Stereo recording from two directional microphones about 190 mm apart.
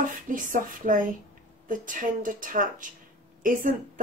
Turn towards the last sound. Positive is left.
turn(degrees=-45)  # may be behind; listen again after turning